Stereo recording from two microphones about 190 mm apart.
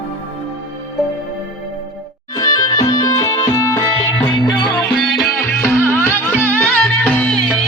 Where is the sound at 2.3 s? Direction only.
15° left (ahead or behind).